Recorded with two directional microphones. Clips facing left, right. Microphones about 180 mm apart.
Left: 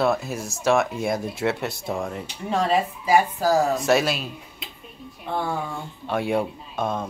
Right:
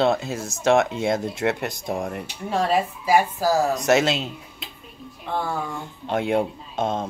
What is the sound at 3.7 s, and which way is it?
Speech, 20° right (ahead or behind).